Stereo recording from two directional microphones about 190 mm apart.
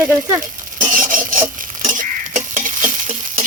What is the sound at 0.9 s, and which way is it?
Stir, 45° right (ahead or behind).